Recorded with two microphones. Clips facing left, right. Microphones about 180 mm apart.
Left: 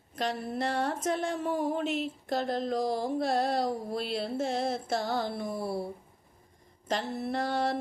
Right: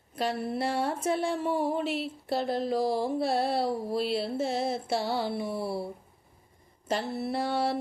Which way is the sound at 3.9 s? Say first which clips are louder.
Right 3 dB; 5° right (ahead or behind).